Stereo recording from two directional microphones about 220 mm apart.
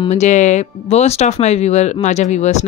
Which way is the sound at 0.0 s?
30° left (ahead or behind).